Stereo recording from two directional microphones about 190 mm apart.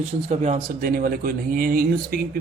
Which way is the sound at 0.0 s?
35° right (ahead or behind).